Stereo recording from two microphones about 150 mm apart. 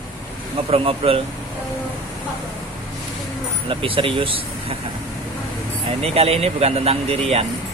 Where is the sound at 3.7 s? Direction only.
35° right (ahead or behind).